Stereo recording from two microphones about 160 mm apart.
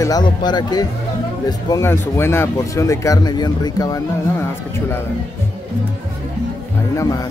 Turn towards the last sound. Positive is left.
turn(degrees=20)  # may be behind; listen again after turning